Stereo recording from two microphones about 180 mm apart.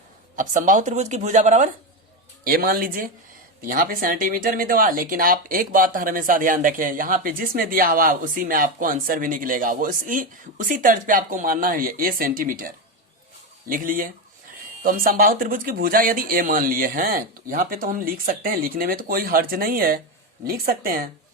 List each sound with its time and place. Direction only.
0.3 s speech: 45° right (ahead or behind)
2.4 s speech: 55° right (ahead or behind)